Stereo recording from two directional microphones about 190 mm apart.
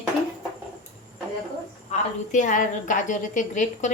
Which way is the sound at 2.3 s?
40° left (ahead or behind).